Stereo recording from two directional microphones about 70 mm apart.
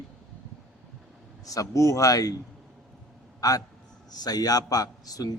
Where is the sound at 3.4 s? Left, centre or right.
Left.